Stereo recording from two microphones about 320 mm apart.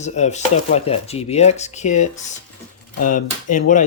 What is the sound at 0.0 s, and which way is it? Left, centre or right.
Speech, left.